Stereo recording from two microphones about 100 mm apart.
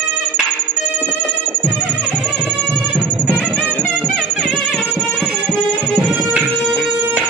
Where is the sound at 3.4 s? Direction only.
15° right (ahead or behind).